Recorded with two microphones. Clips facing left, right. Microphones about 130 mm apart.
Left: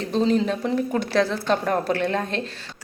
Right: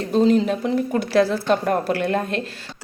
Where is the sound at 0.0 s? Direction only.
5° right (ahead or behind).